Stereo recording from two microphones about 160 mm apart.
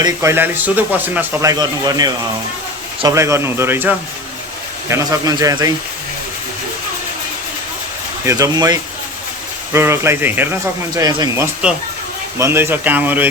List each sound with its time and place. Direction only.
0.0 s speech: 20° right (ahead or behind)
8.2 s speech: 20° right (ahead or behind)